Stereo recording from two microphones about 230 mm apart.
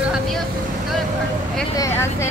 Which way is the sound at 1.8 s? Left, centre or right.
Centre.